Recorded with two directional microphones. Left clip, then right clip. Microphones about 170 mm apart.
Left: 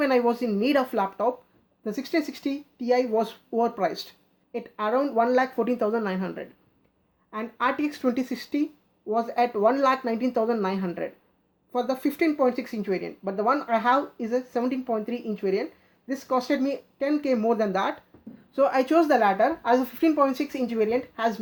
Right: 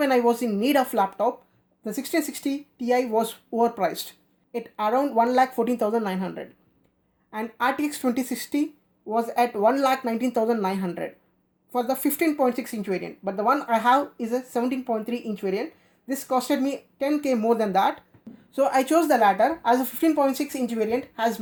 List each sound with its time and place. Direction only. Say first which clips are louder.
0.0 s a woman's voice: right 2 dB; 40° right (ahead or behind)